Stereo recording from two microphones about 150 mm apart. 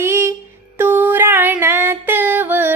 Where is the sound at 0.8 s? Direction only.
15° right (ahead or behind).